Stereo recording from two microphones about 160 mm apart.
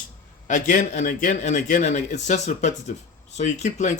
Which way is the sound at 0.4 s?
50° left (ahead or behind).